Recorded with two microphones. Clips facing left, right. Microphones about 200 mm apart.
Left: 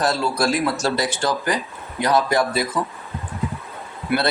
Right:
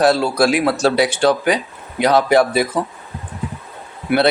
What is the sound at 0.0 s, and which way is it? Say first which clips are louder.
Speech: right 6 dB; 65° right (ahead or behind).